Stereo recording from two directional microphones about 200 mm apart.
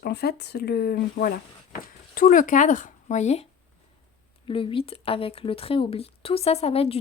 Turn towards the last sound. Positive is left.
turn(degrees=30)  # may be behind; listen again after turning